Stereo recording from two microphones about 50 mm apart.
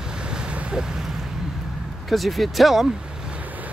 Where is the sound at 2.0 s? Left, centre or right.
Centre.